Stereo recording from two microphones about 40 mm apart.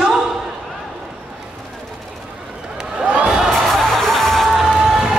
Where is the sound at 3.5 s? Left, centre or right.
Centre.